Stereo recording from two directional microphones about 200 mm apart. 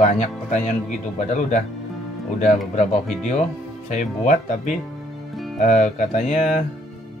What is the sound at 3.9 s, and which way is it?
Speech, 35° left (ahead or behind).